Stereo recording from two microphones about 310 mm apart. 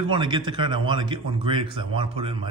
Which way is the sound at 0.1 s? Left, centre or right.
Centre.